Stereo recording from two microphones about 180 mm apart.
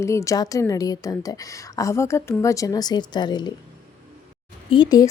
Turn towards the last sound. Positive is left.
turn(degrees=25)  # may be behind; listen again after turning